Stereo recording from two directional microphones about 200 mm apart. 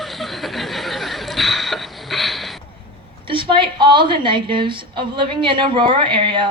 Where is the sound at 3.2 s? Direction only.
25° right (ahead or behind).